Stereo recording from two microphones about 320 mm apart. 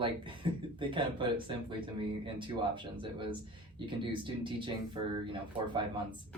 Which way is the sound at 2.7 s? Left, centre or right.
Centre.